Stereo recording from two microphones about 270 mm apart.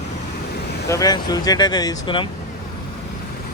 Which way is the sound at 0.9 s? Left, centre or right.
Centre.